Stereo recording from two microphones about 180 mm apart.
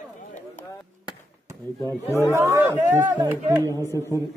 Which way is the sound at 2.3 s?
15° right (ahead or behind).